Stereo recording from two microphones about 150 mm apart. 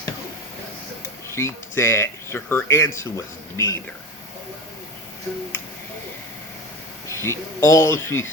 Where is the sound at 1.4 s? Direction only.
15° left (ahead or behind).